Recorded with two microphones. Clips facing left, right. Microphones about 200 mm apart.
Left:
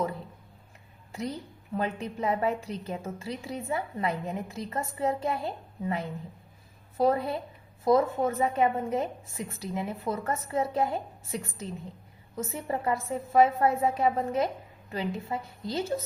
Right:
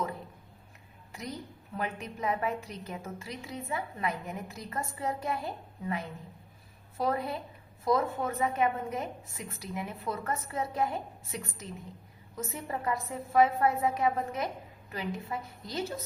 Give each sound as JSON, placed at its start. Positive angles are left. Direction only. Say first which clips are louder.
{"t": 1.1, "sound": "a woman's voice", "louder": "left 5 dB", "side_deg": 30}
{"t": 6.9, "sound": "a woman's voice", "louder": "left 6 dB", "side_deg": 30}